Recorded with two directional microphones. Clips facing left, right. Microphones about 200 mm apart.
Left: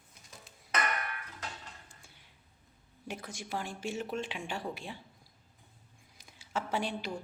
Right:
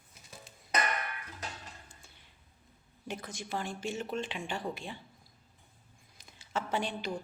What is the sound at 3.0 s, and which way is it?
Speech, 10° left (ahead or behind).